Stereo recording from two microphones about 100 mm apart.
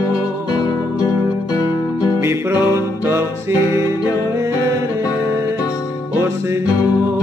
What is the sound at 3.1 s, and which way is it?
Music, 25° right (ahead or behind).